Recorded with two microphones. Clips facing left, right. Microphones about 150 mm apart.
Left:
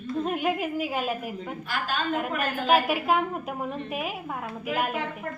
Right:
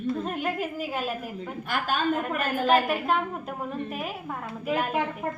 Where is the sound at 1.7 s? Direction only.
50° right (ahead or behind).